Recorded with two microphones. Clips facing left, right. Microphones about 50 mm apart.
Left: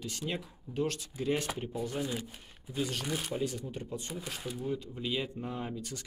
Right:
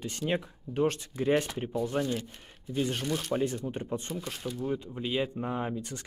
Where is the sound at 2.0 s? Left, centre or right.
Centre.